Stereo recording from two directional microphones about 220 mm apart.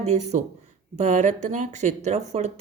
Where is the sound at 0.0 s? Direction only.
30° right (ahead or behind).